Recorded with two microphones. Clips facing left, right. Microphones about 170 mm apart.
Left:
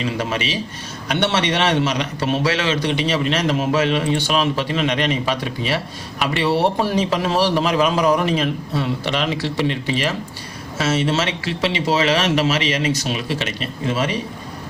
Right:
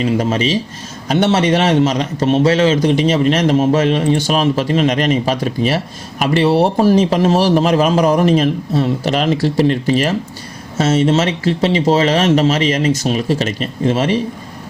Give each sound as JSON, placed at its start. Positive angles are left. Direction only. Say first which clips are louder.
{"t": 0.0, "sound": "a man's voice", "louder": "right 7 dB", "side_deg": -40}
{"t": 2.2, "sound": "speech", "louder": "right 8 dB", "side_deg": -25}
{"t": 2.6, "sound": "a man's voice", "louder": "right 8 dB", "side_deg": -45}